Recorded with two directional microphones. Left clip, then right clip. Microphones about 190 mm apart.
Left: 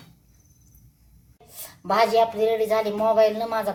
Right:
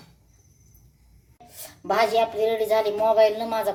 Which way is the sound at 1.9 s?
10° right (ahead or behind).